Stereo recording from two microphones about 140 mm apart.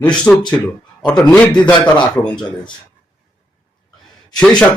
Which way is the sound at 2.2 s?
10° left (ahead or behind).